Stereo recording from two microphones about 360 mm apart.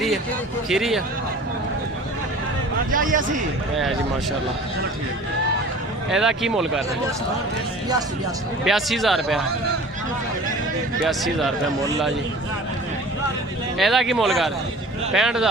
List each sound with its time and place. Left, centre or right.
0.7 s speech: centre
2.9 s a man's voice: right
6.1 s speech: centre
8.6 s speech: centre
11.0 s speech: centre
13.7 s speech: centre